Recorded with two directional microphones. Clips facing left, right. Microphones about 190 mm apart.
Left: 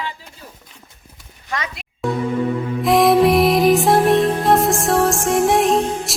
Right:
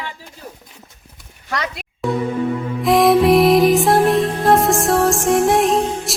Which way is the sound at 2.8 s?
Centre (ahead or behind).